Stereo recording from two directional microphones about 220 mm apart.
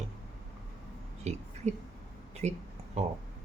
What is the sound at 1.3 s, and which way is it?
Speech, 30° right (ahead or behind).